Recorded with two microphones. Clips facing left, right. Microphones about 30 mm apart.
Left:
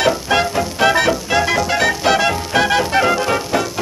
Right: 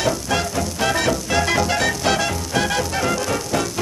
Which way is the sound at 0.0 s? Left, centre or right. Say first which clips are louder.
Left 6 dB; left.